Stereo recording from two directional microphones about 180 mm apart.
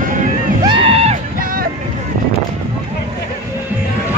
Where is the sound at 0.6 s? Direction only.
30° right (ahead or behind).